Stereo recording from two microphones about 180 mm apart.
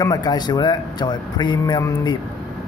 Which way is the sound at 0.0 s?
20° left (ahead or behind).